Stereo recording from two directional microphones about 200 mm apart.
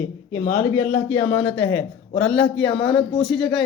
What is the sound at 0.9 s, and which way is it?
A man's voice, 10° left (ahead or behind).